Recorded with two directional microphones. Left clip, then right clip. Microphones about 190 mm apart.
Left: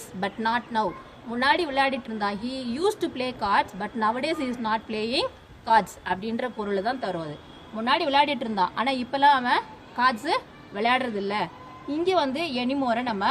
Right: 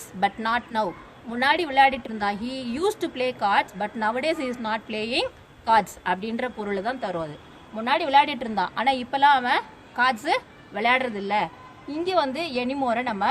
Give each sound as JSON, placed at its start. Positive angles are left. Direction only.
{"t": 0.2, "sound": "a woman's voice", "side_deg": -35}